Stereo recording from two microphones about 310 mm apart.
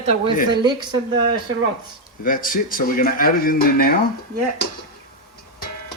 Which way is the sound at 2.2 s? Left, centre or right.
Left.